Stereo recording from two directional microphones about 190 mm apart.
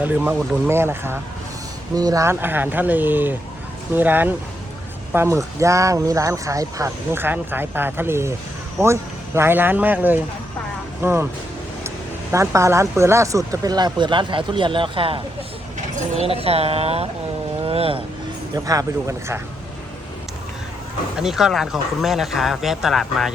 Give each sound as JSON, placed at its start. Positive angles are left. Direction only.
{"t": 0.0, "sound": "speech", "side_deg": -10}
{"t": 12.3, "sound": "speech", "side_deg": -15}
{"t": 17.6, "sound": "vehicle", "side_deg": -30}
{"t": 18.5, "sound": "speech", "side_deg": -20}
{"t": 21.2, "sound": "speech", "side_deg": 0}